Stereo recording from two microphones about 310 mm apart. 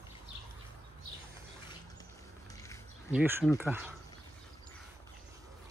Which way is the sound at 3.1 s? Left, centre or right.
Centre.